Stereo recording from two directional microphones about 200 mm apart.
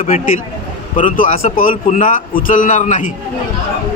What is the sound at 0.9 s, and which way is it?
A man's voice, 40° left (ahead or behind).